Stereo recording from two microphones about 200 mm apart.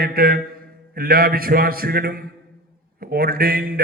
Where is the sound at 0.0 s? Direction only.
50° right (ahead or behind).